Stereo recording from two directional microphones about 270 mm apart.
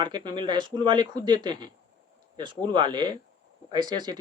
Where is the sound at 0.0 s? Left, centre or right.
Centre.